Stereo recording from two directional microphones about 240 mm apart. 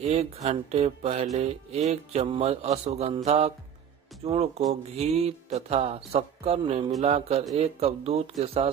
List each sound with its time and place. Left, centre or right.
0.0 s speech: right